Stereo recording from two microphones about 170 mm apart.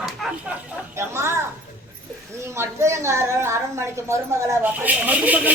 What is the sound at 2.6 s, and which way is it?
A woman's voice, 15° right (ahead or behind).